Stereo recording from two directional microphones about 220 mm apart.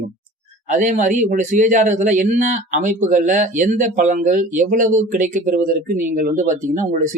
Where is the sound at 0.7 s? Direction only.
35° right (ahead or behind).